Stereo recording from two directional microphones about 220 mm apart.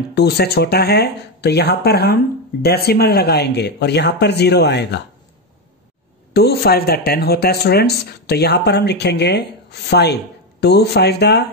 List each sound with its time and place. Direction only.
0.1 s speech: 45° left (ahead or behind)
6.3 s speech: 45° left (ahead or behind)